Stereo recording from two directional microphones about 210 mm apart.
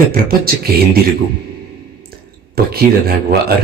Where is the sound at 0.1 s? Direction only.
45° right (ahead or behind).